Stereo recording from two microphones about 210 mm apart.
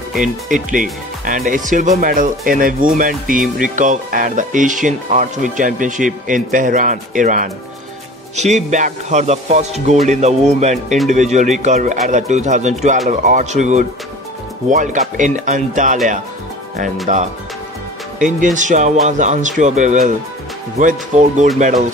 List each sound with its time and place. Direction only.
0.5 s speech: 40° right (ahead or behind)
17.1 s speech: 35° right (ahead or behind)